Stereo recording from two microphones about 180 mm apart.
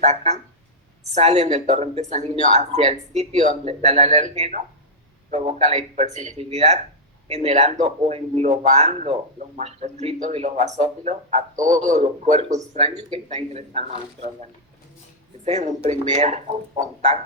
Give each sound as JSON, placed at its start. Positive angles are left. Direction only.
{"t": 0.0, "sound": "speech", "side_deg": -40}
{"t": 15.4, "sound": "speech", "side_deg": -40}